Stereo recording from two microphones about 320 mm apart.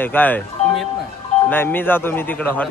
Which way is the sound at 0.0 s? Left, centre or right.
Centre.